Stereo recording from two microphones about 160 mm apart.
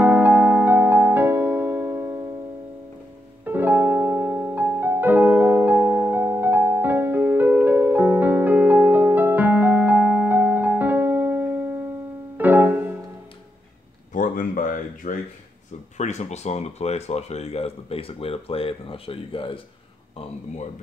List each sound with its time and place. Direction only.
0.0 s music: 10° right (ahead or behind)
3.4 s music: 10° right (ahead or behind)
14.1 s a sound: 55° left (ahead or behind)
16.0 s speech: 45° left (ahead or behind)